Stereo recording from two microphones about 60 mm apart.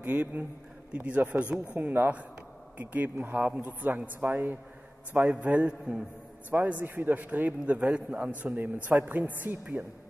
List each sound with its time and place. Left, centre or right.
0.0 s a man's voice: right